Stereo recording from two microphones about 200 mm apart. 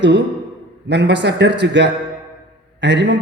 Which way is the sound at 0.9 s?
60° right (ahead or behind).